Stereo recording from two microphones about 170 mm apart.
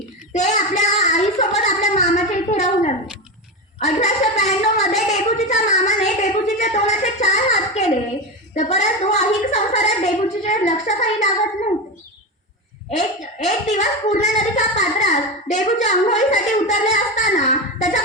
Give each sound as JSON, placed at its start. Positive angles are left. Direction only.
{"t": 0.3, "sound": "a sound", "side_deg": 45}
{"t": 8.5, "sound": "a woman's voice", "side_deg": 40}
{"t": 12.9, "sound": "speech", "side_deg": 45}